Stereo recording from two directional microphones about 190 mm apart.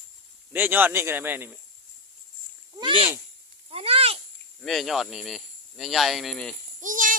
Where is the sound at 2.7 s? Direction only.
25° right (ahead or behind).